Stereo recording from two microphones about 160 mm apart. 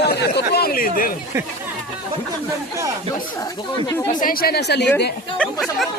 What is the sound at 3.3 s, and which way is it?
Speech, 20° left (ahead or behind).